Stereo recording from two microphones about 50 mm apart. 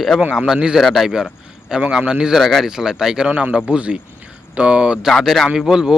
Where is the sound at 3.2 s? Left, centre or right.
Right.